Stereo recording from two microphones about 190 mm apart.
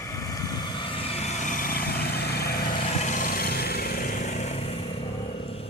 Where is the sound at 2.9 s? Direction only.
40° left (ahead or behind).